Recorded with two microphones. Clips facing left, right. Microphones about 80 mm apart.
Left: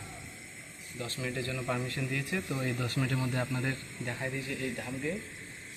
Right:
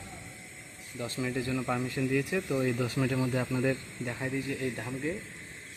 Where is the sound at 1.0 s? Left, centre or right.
Right; by 4.1 s centre.